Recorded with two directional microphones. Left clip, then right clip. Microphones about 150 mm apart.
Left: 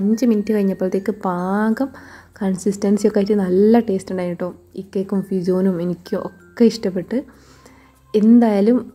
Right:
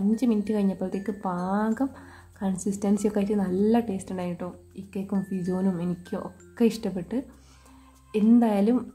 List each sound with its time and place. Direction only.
0.2 s a woman's voice: 25° left (ahead or behind)